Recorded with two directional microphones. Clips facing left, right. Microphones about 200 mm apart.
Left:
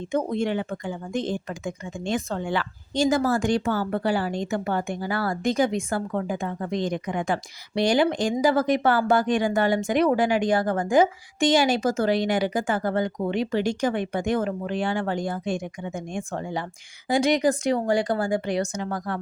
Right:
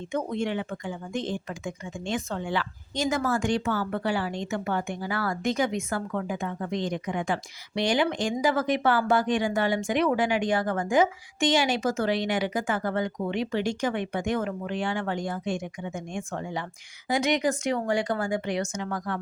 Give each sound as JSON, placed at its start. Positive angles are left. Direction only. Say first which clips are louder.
{"t": 0.1, "sound": "speech", "louder": "left 4 dB", "side_deg": 35}
{"t": 2.9, "sound": "speech", "louder": "left 5 dB", "side_deg": 30}